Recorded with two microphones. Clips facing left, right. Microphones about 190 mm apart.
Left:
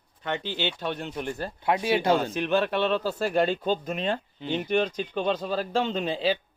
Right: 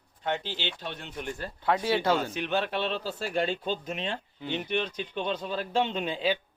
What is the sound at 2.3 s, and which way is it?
Speech, 45° left (ahead or behind).